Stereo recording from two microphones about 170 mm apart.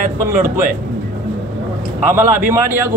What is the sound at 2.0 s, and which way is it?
Speech, 15° right (ahead or behind).